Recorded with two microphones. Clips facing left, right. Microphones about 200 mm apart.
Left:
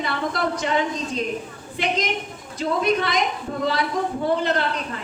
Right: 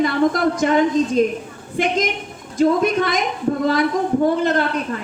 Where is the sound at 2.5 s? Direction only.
45° right (ahead or behind).